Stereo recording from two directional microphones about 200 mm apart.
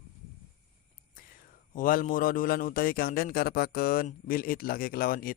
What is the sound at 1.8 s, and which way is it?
A man's voice, 40° left (ahead or behind).